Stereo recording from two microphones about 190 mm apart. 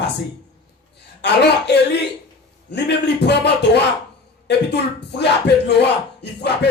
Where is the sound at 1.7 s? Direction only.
65° left (ahead or behind).